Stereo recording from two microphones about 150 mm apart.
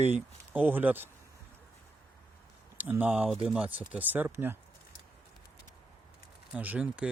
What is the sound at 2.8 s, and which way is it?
Speech, 10° right (ahead or behind).